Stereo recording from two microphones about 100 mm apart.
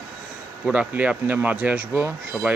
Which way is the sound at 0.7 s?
15° right (ahead or behind).